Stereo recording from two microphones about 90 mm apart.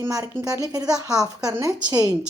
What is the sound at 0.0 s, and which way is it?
A woman's voice, 40° right (ahead or behind).